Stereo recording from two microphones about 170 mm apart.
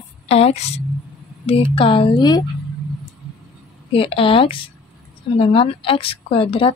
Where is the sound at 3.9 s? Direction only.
35° left (ahead or behind).